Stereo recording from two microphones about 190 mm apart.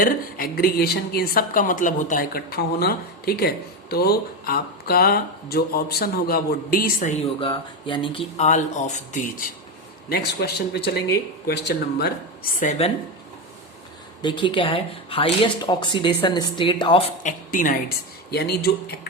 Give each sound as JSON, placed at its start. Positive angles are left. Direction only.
{"t": 0.0, "sound": "speech", "side_deg": 50}
{"t": 7.3, "sound": "speech", "side_deg": 25}
{"t": 8.4, "sound": "speech", "side_deg": 40}
{"t": 10.1, "sound": "a woman's voice", "side_deg": 60}
{"t": 12.5, "sound": "speech", "side_deg": 35}
{"t": 14.2, "sound": "speech", "side_deg": 25}
{"t": 17.2, "sound": "a woman's voice", "side_deg": 45}